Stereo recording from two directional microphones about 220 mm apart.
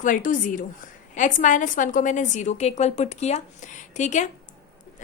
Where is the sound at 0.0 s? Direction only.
35° left (ahead or behind).